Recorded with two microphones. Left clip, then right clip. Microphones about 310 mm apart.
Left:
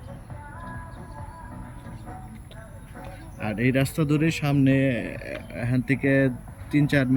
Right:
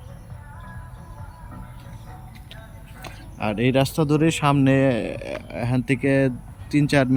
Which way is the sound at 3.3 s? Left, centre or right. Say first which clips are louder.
Right 4 dB; centre.